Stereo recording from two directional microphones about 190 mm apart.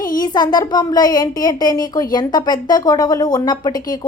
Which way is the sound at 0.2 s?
20° left (ahead or behind).